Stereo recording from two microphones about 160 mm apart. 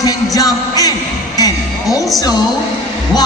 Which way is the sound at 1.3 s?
20° left (ahead or behind).